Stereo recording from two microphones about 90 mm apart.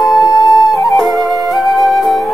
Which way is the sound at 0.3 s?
45° left (ahead or behind).